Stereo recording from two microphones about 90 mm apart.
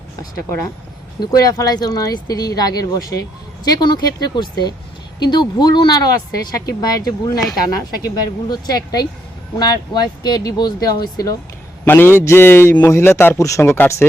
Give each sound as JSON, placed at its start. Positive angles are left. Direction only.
{"t": 1.2, "sound": "speech", "side_deg": 45}
{"t": 11.9, "sound": "speech", "side_deg": 25}